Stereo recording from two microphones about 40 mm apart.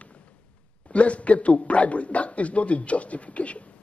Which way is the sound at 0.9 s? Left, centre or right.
Left.